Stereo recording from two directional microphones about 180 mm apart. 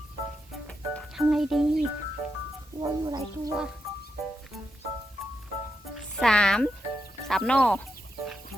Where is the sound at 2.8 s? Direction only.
25° right (ahead or behind).